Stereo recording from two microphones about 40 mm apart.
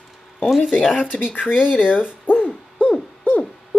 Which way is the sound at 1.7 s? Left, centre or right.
Left.